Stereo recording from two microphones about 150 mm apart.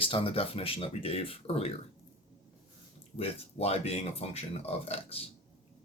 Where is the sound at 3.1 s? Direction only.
40° left (ahead or behind).